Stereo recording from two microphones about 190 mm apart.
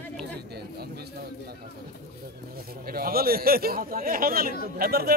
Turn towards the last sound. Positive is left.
turn(degrees=-55)  # may be behind; listen again after turning